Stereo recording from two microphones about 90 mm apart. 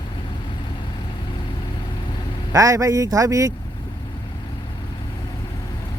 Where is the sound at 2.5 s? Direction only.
40° right (ahead or behind).